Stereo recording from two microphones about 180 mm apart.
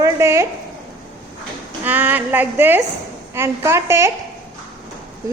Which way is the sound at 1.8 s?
10° right (ahead or behind).